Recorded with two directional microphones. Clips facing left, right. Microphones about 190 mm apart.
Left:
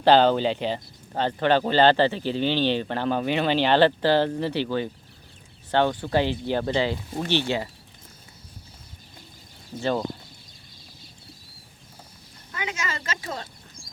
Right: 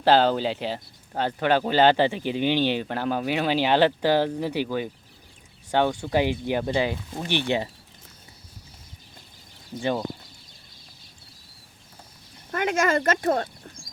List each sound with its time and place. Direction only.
0.0 s speech: 5° right (ahead or behind)
12.5 s speech: 55° right (ahead or behind)